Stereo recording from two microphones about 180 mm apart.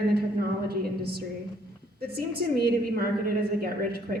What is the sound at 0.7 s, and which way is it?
A woman's voice, 60° right (ahead or behind).